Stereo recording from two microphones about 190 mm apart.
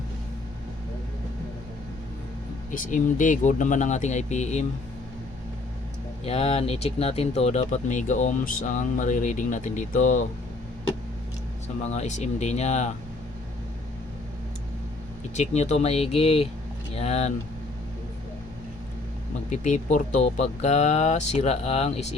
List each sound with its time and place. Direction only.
2.7 s speech: 45° left (ahead or behind)
6.2 s speech: 30° left (ahead or behind)
11.8 s speech: 35° left (ahead or behind)
15.4 s speech: 35° left (ahead or behind)
19.5 s speech: 40° left (ahead or behind)